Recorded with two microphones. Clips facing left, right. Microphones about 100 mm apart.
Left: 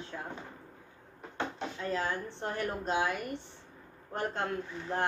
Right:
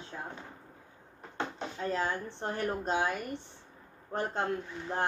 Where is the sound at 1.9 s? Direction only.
30° right (ahead or behind).